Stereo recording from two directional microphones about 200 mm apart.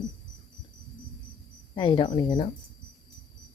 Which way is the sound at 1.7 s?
25° left (ahead or behind).